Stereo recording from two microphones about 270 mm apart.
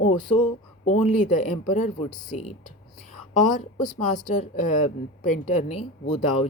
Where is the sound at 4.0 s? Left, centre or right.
Left.